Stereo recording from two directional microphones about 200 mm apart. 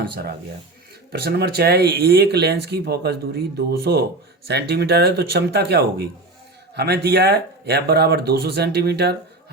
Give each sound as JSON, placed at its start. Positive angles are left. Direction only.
{"t": 1.1, "sound": "speech", "side_deg": -55}